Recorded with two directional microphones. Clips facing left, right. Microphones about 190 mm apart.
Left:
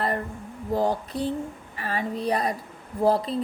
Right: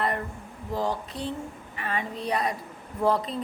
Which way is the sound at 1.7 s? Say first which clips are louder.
Left 3 dB; 35° left (ahead or behind).